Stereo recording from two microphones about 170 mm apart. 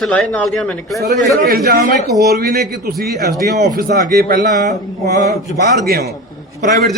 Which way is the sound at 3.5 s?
65° right (ahead or behind).